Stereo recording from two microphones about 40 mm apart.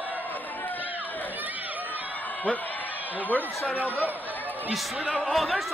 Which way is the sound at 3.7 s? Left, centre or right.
Left.